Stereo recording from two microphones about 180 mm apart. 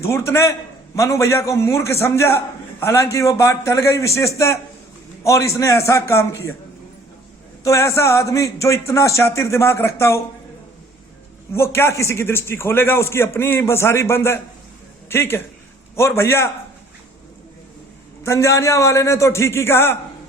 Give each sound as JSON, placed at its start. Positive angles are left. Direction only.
{"t": 0.0, "sound": "a man's voice", "side_deg": 15}
{"t": 7.6, "sound": "a man's voice", "side_deg": 15}
{"t": 11.5, "sound": "a man's voice", "side_deg": 15}
{"t": 18.2, "sound": "a man's voice", "side_deg": 15}